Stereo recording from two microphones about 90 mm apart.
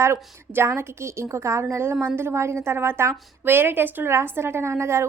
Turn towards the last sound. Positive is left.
turn(degrees=-30)  # may be behind; listen again after turning